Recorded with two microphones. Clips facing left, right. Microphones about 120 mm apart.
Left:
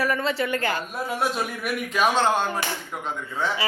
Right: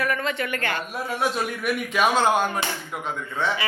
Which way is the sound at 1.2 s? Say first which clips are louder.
Right 2 dB; centre (ahead or behind).